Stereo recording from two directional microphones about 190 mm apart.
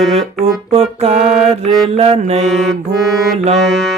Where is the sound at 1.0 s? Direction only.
35° right (ahead or behind).